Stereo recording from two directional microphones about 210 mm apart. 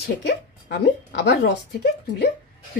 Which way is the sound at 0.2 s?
50° left (ahead or behind).